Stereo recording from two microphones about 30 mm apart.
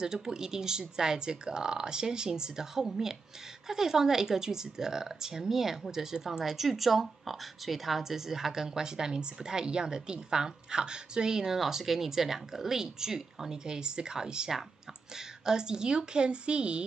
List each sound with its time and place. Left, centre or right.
0.0 s speech: centre
11.5 s speech: centre; by 16.8 s right